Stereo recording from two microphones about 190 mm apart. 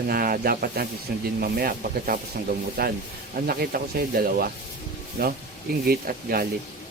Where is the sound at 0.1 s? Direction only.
50° right (ahead or behind).